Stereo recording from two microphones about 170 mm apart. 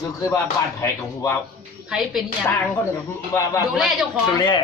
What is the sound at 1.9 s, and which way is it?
Speech, 5° right (ahead or behind).